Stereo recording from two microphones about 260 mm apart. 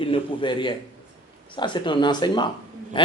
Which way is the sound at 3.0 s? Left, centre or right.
Centre.